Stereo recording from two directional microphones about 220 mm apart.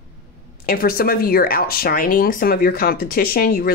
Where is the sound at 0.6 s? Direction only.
40° left (ahead or behind).